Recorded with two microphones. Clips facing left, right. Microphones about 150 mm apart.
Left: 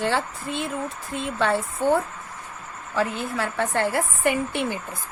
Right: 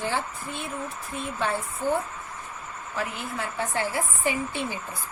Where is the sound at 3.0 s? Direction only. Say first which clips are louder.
Left 6 dB; 80° left.